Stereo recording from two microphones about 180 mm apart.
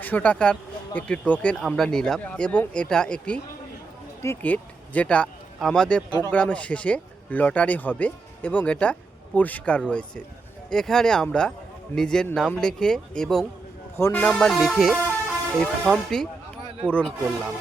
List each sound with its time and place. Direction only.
0.0 s speech: 10° left (ahead or behind)
6.1 s speech: 20° left (ahead or behind)
6.3 s speech: 5° left (ahead or behind)